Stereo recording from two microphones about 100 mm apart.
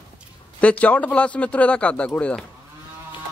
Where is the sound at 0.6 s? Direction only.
15° left (ahead or behind).